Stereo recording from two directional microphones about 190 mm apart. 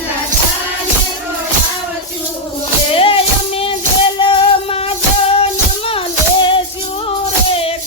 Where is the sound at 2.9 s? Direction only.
30° left (ahead or behind).